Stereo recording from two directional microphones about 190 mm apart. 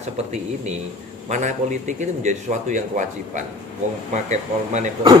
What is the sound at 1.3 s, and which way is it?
A man's voice, 40° right (ahead or behind).